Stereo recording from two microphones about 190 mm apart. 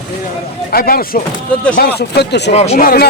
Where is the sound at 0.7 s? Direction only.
50° left (ahead or behind).